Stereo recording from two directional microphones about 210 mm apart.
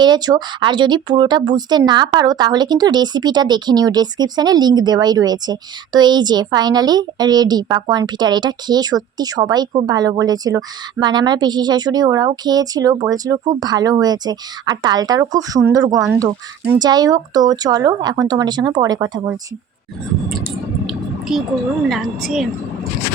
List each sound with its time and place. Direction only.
0.0 s speech: 20° right (ahead or behind)
20.8 s a sound: centre (ahead or behind)
21.8 s a woman's voice: centre (ahead or behind)